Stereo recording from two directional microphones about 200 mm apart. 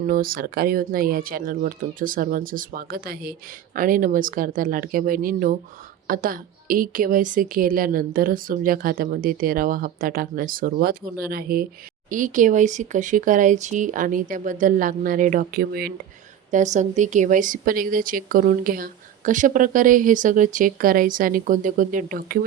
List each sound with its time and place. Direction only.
0.1 s a woman's voice: 45° right (ahead or behind)
16.5 s a woman's voice: 35° right (ahead or behind)